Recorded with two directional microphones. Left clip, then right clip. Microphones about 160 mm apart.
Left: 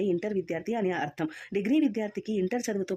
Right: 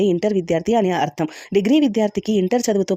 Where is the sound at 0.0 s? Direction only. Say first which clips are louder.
Right 10 dB; 40° right (ahead or behind).